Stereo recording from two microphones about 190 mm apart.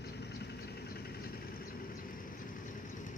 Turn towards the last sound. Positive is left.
turn(degrees=45)  # may be behind; listen again after turning